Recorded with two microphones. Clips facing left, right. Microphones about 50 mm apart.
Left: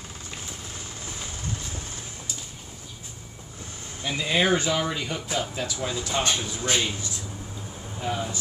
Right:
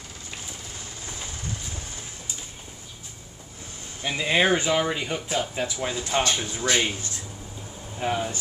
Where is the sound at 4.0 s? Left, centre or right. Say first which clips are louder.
Right 2 dB; centre.